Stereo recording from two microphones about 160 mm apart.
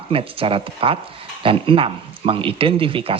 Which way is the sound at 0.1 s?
35° right (ahead or behind).